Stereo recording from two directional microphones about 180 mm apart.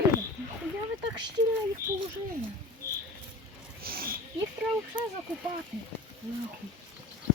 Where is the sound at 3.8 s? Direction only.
55° right (ahead or behind).